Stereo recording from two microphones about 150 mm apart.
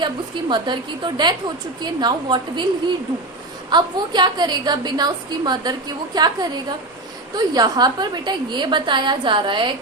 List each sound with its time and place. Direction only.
0.0 s a woman's voice: 30° right (ahead or behind)